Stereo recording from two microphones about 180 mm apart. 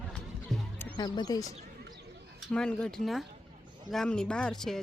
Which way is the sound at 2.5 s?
5° left (ahead or behind).